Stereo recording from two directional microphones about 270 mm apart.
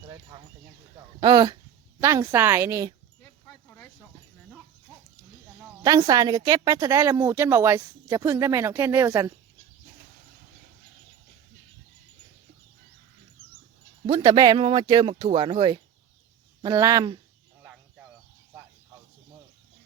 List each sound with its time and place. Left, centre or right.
1.2 s a woman's voice: centre
5.8 s a woman's voice: centre
14.1 s a woman's voice: centre